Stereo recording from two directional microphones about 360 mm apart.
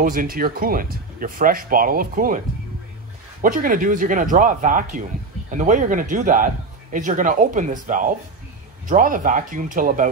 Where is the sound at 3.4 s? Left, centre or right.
Right.